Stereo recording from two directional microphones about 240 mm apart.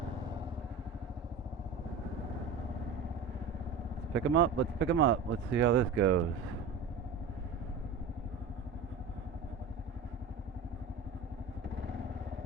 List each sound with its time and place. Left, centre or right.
4.1 s speech: right